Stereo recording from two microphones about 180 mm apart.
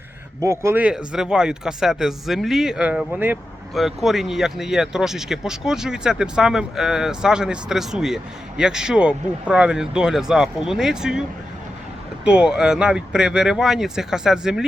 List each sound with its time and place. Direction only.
0.4 s speech: 15° right (ahead or behind)
12.2 s speech: 5° right (ahead or behind)